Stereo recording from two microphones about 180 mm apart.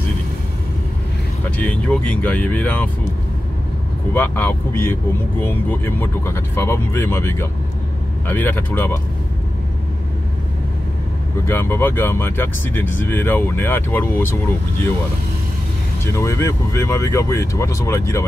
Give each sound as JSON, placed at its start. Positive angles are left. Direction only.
{"t": 1.6, "sound": "speech", "side_deg": 5}
{"t": 4.1, "sound": "speech", "side_deg": 10}
{"t": 11.4, "sound": "speech", "side_deg": 10}
{"t": 16.0, "sound": "speech", "side_deg": 15}